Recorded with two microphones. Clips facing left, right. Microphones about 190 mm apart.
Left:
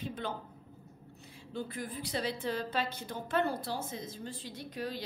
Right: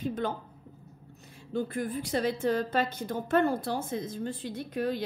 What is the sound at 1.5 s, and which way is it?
A woman's voice, 50° right (ahead or behind).